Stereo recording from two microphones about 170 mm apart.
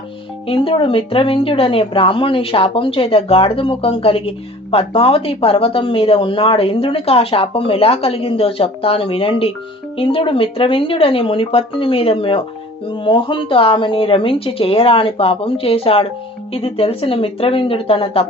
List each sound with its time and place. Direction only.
0.4 s speech: 30° left (ahead or behind)